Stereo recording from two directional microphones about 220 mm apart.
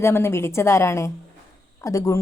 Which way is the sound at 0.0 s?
10° left (ahead or behind).